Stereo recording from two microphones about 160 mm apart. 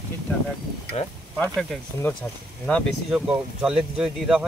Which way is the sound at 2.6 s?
Centre (ahead or behind).